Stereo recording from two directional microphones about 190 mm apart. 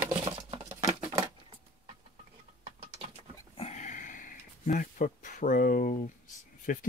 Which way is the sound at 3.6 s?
35° left (ahead or behind).